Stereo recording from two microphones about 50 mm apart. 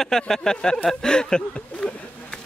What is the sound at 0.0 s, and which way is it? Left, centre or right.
Speech, centre.